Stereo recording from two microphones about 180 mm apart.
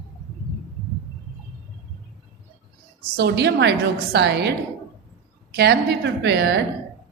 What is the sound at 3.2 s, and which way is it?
A woman's voice, 65° right (ahead or behind).